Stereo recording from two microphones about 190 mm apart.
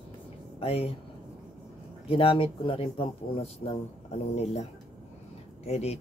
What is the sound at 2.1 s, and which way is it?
Speech, 30° left (ahead or behind).